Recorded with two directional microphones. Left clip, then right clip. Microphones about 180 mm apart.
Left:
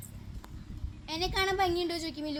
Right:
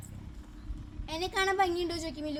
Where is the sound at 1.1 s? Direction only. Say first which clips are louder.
Even; 40° left (ahead or behind).